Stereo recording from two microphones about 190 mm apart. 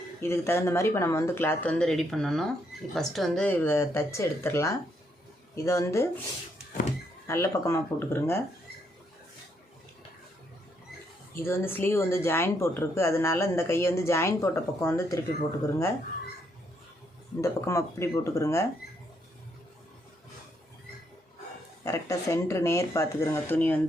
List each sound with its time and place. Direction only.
0.2 s speech: 15° left (ahead or behind)
7.3 s speech: 15° left (ahead or behind)
11.3 s speech: 10° left (ahead or behind)
17.4 s speech: 15° left (ahead or behind)
21.8 s speech: 15° left (ahead or behind)